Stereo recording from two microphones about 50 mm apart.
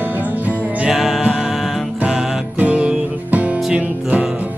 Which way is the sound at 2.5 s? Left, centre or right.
Right.